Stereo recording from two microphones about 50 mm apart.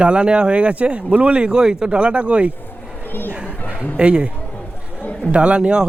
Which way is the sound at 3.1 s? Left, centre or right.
Left.